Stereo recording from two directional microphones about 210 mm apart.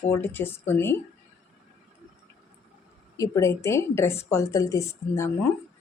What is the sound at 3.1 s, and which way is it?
A woman's voice, 15° left (ahead or behind).